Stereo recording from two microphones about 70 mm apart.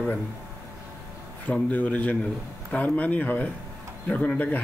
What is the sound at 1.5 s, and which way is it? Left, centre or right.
Speech, left.